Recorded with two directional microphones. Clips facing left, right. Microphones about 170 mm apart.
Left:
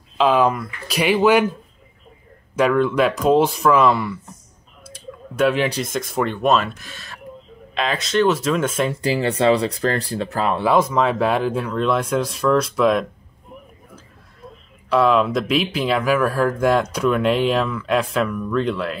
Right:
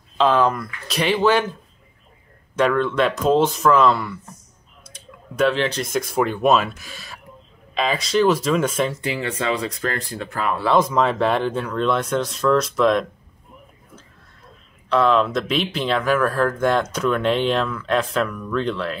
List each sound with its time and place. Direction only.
0.2 s speech: 10° left (ahead or behind)
2.5 s speech: 10° left (ahead or behind)
4.8 s clicking: 5° left (ahead or behind)
5.8 s speech: centre (ahead or behind)
9.0 s speech: 35° left (ahead or behind)
10.6 s speech: 10° left (ahead or behind)
14.9 s speech: 5° left (ahead or behind)